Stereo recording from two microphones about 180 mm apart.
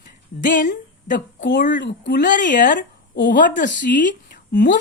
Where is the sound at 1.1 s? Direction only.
75° left (ahead or behind).